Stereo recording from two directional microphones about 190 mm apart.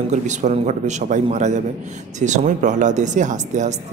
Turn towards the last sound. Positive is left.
turn(degrees=-40)  # may be behind; listen again after turning